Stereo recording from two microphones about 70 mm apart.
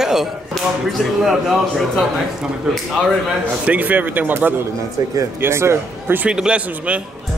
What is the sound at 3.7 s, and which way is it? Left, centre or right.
Speech, right.